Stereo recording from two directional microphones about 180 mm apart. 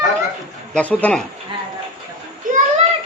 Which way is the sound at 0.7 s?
10° left (ahead or behind).